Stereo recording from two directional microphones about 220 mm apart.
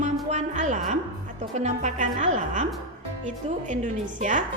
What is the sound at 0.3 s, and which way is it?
A woman's voice, 35° right (ahead or behind).